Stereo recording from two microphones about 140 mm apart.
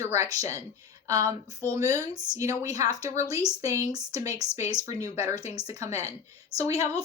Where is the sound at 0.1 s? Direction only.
20° right (ahead or behind).